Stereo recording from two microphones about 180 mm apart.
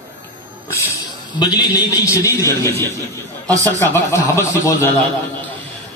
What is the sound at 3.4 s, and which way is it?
Speech, 20° right (ahead or behind).